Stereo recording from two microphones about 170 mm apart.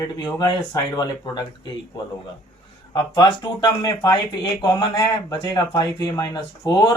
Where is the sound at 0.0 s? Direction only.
25° left (ahead or behind).